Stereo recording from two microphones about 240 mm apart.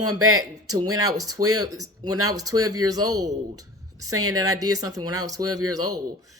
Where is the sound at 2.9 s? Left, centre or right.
Centre.